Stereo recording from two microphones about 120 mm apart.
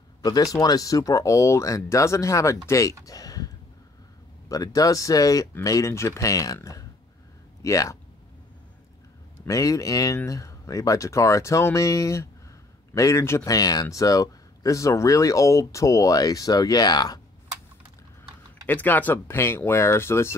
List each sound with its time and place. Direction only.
0.2 s speech: 30° left (ahead or behind)
3.1 s a sound: 30° left (ahead or behind)
4.5 s speech: 30° left (ahead or behind)
9.5 s speech: 25° left (ahead or behind)
18.7 s speech: 15° left (ahead or behind)